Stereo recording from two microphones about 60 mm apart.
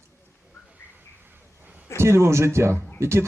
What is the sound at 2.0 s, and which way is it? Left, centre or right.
Speech, right.